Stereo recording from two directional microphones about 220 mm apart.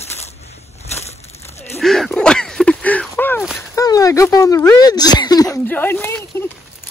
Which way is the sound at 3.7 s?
15° left (ahead or behind).